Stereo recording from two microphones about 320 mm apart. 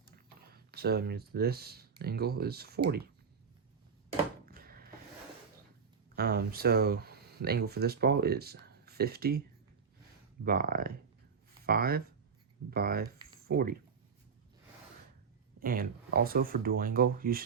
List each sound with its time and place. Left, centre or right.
0.5 s speech: right
4.4 s a sound: right
6.1 s speech: right
10.4 s speech: right
15.6 s speech: right